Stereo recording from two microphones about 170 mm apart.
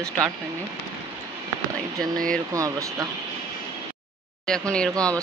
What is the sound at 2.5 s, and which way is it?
Speech, 20° right (ahead or behind).